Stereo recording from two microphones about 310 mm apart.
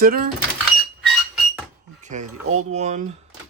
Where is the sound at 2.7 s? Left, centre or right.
Right.